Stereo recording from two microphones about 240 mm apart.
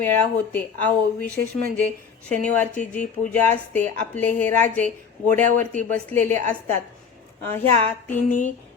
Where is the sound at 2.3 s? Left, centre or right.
Centre.